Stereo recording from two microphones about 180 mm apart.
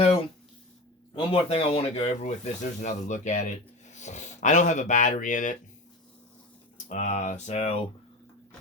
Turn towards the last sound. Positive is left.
turn(degrees=35)  # may be behind; listen again after turning